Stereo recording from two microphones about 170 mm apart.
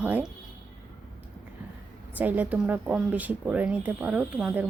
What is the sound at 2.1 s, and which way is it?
A woman's voice, 10° right (ahead or behind).